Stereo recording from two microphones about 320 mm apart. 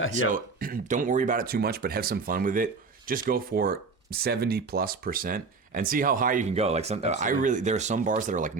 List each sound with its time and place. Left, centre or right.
0.1 s speech: right